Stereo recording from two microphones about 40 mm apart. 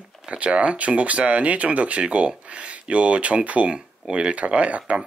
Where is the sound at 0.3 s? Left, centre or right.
Right.